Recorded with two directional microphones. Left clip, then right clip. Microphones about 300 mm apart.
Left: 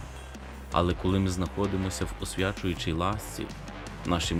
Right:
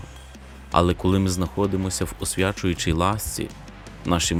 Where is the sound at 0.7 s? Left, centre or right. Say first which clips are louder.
Right 7 dB; centre.